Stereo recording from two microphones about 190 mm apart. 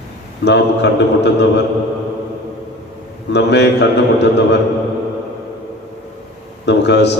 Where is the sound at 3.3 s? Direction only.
65° left (ahead or behind).